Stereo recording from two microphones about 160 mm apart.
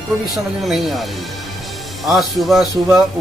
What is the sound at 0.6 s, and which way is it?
A man's voice, centre (ahead or behind).